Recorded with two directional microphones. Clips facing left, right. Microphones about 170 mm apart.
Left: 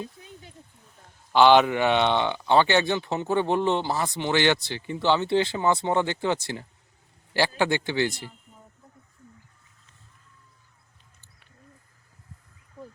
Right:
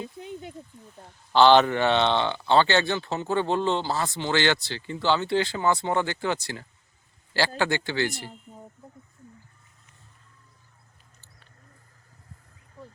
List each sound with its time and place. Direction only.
1.3 s speech: 10° left (ahead or behind)